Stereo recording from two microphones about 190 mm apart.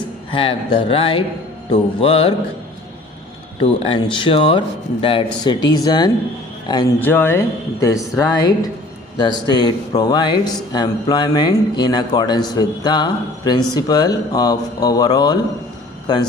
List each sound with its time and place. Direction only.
0.3 s speech: 25° left (ahead or behind)
3.6 s speech: 25° left (ahead or behind)
7.0 s speech: 10° left (ahead or behind)